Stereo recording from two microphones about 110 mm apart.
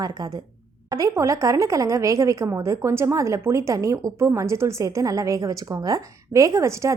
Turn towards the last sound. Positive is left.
turn(degrees=-25)  # may be behind; listen again after turning